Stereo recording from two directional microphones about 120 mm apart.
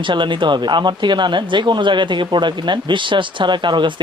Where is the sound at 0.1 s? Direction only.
40° right (ahead or behind).